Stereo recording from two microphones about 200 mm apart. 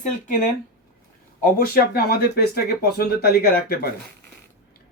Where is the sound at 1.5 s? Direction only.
50° left (ahead or behind).